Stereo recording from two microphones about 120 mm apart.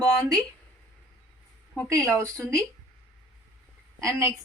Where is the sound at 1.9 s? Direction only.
25° right (ahead or behind).